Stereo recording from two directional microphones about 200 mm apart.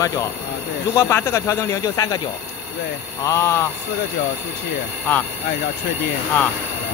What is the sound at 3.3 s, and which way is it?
Speech, 15° left (ahead or behind).